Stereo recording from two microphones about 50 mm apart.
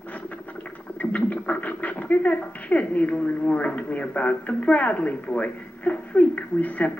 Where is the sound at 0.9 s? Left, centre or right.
Left.